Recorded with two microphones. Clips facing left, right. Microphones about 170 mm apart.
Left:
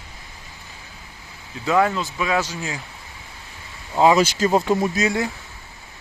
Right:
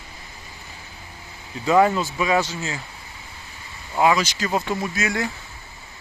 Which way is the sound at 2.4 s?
10° left (ahead or behind).